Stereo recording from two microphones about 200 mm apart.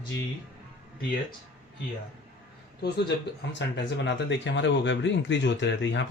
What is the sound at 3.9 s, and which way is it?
Speech, 65° left (ahead or behind).